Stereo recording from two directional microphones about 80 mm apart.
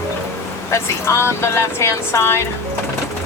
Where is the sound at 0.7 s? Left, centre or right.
Left.